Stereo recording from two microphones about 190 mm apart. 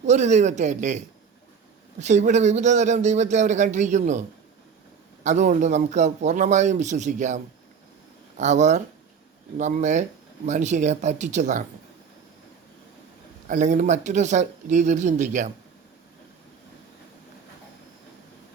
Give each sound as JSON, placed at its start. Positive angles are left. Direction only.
{"t": 0.0, "sound": "a man's voice", "side_deg": -35}
{"t": 5.2, "sound": "a man's voice", "side_deg": -40}
{"t": 13.5, "sound": "a man's voice", "side_deg": -40}